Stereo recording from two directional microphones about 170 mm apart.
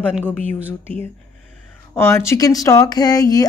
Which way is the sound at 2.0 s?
15° left (ahead or behind).